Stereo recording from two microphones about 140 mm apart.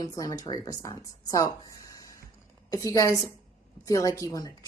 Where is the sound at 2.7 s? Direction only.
25° left (ahead or behind).